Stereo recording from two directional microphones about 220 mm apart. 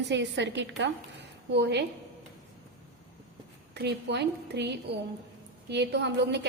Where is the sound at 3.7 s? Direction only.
50° right (ahead or behind).